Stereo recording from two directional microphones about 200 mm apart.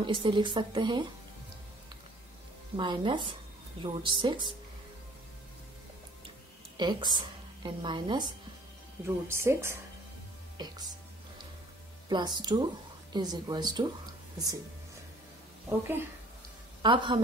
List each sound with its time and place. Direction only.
0.0 s a woman's voice: 25° right (ahead or behind)
2.7 s a woman's voice: 25° right (ahead or behind)
6.8 s a woman's voice: 20° right (ahead or behind)
9.0 s speech: 10° right (ahead or behind)
12.1 s a woman's voice: 20° right (ahead or behind)
16.8 s a woman's voice: 25° right (ahead or behind)